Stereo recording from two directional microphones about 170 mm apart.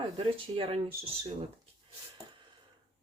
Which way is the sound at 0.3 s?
30° right (ahead or behind).